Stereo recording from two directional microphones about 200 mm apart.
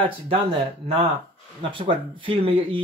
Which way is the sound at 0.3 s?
30° right (ahead or behind).